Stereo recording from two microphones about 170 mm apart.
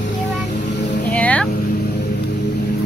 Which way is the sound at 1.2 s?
10° left (ahead or behind).